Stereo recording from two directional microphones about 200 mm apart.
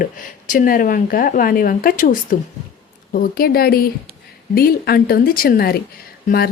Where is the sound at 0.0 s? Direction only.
45° left (ahead or behind).